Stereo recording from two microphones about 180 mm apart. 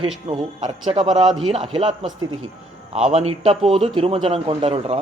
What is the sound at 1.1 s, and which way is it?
Speech, centre (ahead or behind).